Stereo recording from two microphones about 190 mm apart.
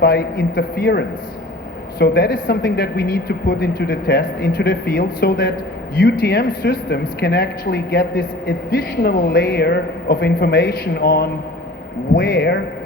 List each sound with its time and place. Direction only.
0.0 s speech: 60° left (ahead or behind)
6.0 s a man's voice: 65° left (ahead or behind)